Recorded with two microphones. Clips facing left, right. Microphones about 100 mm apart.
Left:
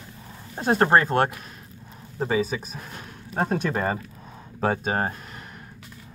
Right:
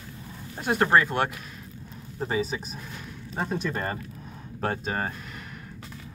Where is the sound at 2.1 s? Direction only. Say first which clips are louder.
Left 4 dB; 90° left.